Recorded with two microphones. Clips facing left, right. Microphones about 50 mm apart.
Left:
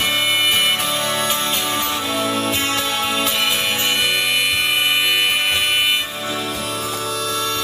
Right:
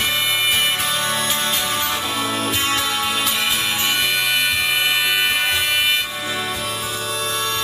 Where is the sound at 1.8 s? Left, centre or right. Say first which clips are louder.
Left 1 dB; right.